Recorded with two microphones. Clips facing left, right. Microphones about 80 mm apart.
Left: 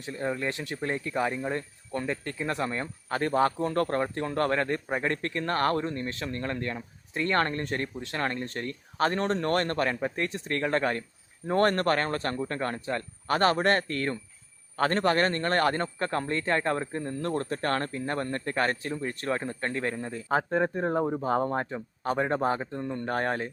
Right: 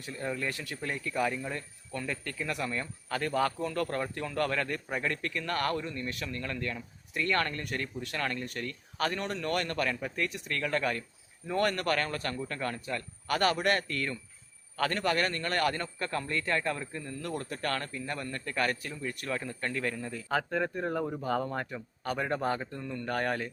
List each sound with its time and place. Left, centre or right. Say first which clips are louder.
0.0 s speech: left 4 dB; left